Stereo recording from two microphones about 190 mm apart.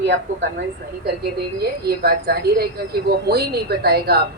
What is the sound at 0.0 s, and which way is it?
A woman's voice, 65° right (ahead or behind).